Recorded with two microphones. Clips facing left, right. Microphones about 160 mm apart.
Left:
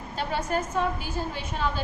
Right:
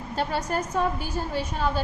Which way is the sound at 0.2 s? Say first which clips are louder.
Right 1 dB; 40° right (ahead or behind).